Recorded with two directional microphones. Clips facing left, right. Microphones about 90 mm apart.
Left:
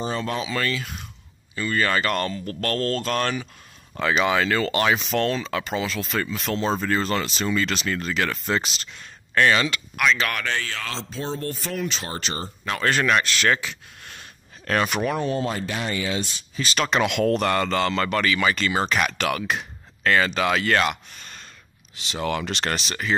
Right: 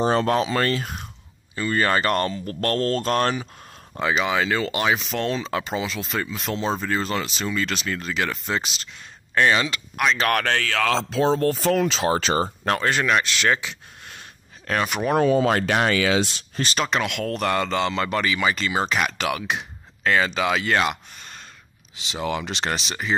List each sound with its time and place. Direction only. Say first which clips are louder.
0.0 s speech: right 7 dB; 60° right (ahead or behind); by 1.0 s 40° right (ahead or behind)
1.5 s speech: right 2 dB; 30° right (ahead or behind)
3.9 s speech: even; 15° right (ahead or behind)
4.2 s speech: left 3 dB; 5° right (ahead or behind)
5.3 s speech: even; 25° right (ahead or behind)
10.2 s speech: right 5 dB; 55° right (ahead or behind); by 12.5 s 85° right
12.8 s speech: left 3 dB; 10° right (ahead or behind)
14.7 s speech: left 1 dB; 5° right (ahead or behind)
15.1 s speech: right 7 dB; 80° right
16.9 s speech: left 4 dB; 10° left (ahead or behind); by 20.9 s 10° right (ahead or behind)
22.1 s speech: left 1 dB; 15° right (ahead or behind)